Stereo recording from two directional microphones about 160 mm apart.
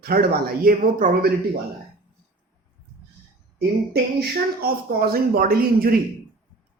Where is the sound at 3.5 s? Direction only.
85° right.